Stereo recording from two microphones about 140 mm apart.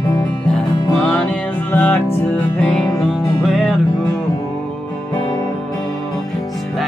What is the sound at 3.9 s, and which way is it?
Music, 25° left (ahead or behind).